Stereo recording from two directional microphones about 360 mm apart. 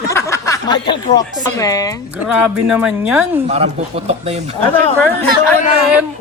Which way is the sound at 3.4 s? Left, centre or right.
Centre.